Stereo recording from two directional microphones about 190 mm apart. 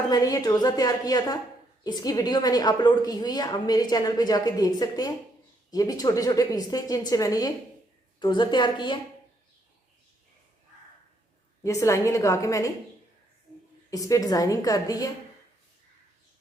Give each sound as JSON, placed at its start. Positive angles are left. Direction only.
{"t": 0.1, "sound": "a woman's voice", "side_deg": 20}
{"t": 11.6, "sound": "a woman's voice", "side_deg": 15}
{"t": 13.9, "sound": "a woman's voice", "side_deg": 20}